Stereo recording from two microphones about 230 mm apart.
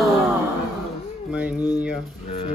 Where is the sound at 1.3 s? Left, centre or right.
Centre.